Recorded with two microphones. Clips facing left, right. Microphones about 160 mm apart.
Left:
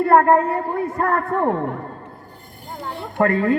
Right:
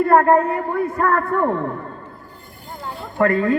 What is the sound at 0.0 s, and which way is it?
A man's voice, 30° left (ahead or behind).